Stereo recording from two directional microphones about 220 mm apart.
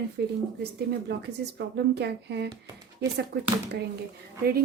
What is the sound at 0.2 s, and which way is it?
Speech, 50° right (ahead or behind).